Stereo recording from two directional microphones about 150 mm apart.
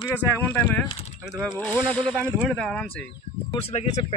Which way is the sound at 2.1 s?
15° right (ahead or behind).